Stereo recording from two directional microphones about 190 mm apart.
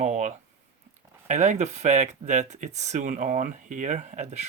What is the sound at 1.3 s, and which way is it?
Speech, 40° right (ahead or behind).